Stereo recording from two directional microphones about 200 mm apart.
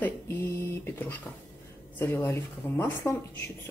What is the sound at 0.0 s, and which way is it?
Speech, 10° left (ahead or behind).